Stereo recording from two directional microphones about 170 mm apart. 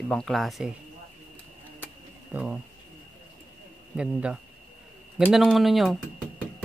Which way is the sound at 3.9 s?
5° right (ahead or behind).